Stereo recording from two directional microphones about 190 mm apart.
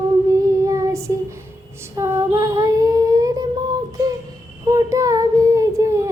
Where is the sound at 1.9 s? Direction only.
15° right (ahead or behind).